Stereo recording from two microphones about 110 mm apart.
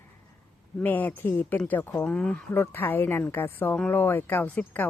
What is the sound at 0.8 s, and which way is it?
Speech, 15° left (ahead or behind).